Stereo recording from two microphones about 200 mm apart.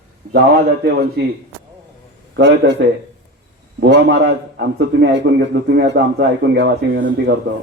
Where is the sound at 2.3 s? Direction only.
60° right (ahead or behind).